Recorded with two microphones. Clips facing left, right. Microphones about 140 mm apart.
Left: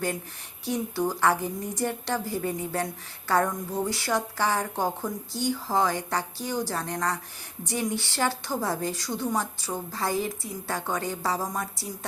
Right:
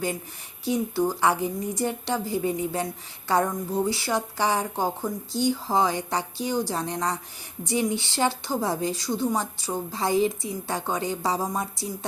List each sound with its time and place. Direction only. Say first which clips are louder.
0.6 s a woman's voice: right 3 dB; 10° right (ahead or behind)